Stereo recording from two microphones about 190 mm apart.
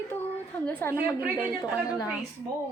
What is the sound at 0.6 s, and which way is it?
Speech, 10° left (ahead or behind).